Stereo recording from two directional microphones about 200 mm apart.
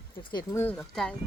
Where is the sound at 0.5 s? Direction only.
10° left (ahead or behind).